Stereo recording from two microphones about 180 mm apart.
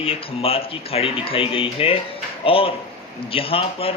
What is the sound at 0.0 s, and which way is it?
Speech, 30° left (ahead or behind).